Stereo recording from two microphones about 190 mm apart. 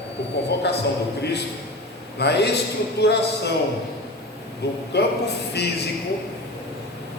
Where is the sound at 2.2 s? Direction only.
60° left (ahead or behind).